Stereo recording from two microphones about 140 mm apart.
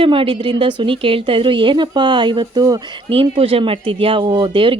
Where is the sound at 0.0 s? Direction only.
40° right (ahead or behind).